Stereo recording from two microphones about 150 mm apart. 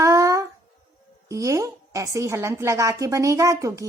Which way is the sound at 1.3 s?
20° right (ahead or behind).